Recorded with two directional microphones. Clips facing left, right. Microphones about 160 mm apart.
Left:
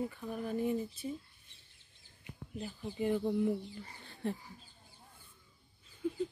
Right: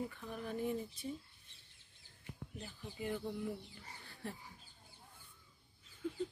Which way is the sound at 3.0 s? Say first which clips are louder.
Left 9 dB; 25° left (ahead or behind).